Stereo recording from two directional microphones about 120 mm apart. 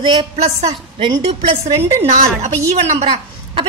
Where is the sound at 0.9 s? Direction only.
45° right (ahead or behind).